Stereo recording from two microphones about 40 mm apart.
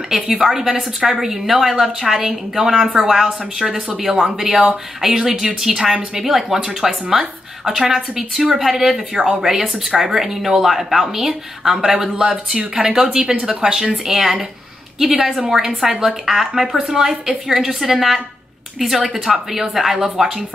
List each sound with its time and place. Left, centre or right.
0.4 s speech: centre
12.5 s a woman's voice: right; by 20.4 s centre